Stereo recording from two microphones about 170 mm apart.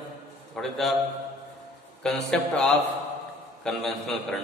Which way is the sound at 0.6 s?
Centre (ahead or behind).